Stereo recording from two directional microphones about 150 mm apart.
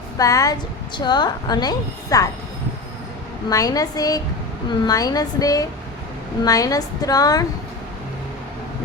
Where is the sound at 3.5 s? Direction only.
25° left (ahead or behind).